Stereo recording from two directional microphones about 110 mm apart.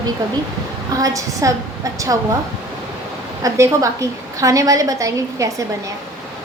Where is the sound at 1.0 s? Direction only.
30° right (ahead or behind).